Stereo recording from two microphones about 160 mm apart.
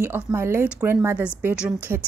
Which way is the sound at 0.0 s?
15° right (ahead or behind).